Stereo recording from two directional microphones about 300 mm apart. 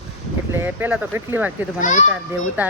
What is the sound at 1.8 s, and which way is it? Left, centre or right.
Speech, left.